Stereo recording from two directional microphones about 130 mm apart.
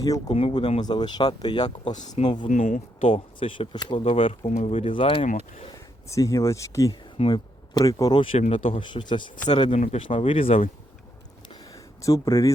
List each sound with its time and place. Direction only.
0.0 s speech: 30° left (ahead or behind)
0.3 s speech: 45° left (ahead or behind)
1.8 s speech: 60° left (ahead or behind)
2.2 s speech: 35° left (ahead or behind)
2.5 s speech: 85° left
3.0 s speech: 45° left (ahead or behind)
6.1 s speech: 25° left (ahead or behind)
7.3 s speech: 35° left (ahead or behind)
8.1 s speech: 45° left (ahead or behind)
9.7 s speech: 65° left (ahead or behind)
10.1 s speech: 45° left (ahead or behind)
11.4 s a sound: 25° left (ahead or behind)